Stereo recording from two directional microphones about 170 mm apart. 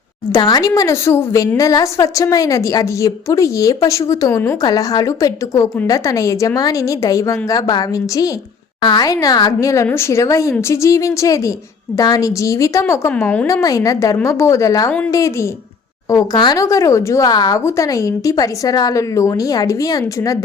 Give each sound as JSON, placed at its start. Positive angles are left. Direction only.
{"t": 0.3, "sound": "a woman's voice", "side_deg": 20}
{"t": 13.5, "sound": "a woman's voice", "side_deg": 20}